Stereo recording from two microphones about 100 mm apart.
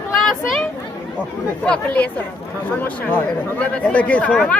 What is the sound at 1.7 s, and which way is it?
Speech, 15° left (ahead or behind).